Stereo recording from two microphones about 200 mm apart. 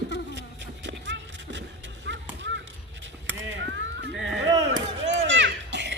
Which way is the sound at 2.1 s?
65° right (ahead or behind).